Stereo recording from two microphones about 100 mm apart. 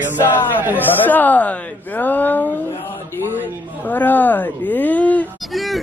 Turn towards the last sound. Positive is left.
turn(degrees=0)  # may be behind; listen again after turning